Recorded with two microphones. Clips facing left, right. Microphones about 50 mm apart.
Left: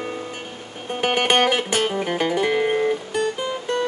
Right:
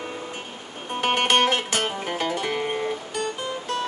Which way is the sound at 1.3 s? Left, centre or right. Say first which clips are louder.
Left 2 dB; centre.